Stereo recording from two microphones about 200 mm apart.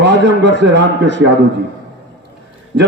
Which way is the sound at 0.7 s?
60° right (ahead or behind).